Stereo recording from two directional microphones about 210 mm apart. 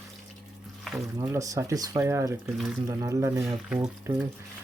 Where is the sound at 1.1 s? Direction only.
15° right (ahead or behind).